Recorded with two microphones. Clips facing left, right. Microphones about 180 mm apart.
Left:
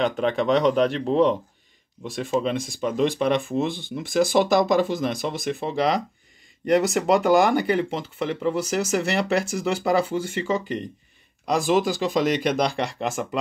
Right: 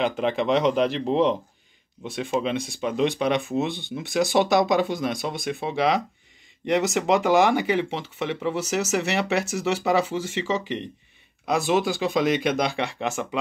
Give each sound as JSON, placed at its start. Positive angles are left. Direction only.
{"t": 0.0, "sound": "speech", "side_deg": -5}